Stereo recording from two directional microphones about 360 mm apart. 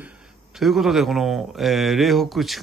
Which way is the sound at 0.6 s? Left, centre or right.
Centre.